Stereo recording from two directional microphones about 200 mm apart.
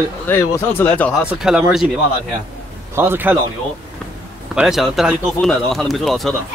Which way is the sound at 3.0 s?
10° right (ahead or behind).